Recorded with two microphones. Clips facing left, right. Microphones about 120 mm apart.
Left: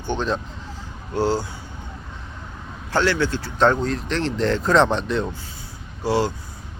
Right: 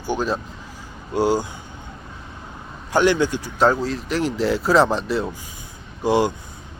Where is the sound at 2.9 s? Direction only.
15° right (ahead or behind).